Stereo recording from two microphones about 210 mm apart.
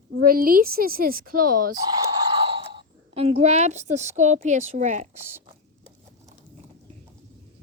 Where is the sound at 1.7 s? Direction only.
15° right (ahead or behind); by 4.0 s 35° right (ahead or behind).